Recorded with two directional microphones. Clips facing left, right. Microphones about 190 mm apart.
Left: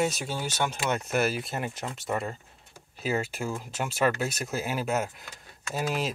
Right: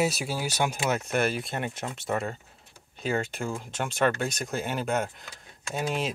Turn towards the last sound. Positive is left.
turn(degrees=0)  # may be behind; listen again after turning